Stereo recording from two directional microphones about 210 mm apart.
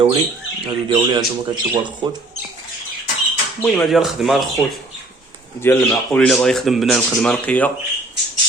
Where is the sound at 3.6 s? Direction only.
Centre (ahead or behind).